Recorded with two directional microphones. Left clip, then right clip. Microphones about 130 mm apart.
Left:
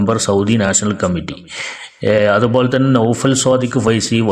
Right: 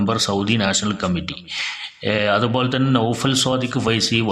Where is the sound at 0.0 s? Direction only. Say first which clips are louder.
Left 5 dB; 40° left (ahead or behind).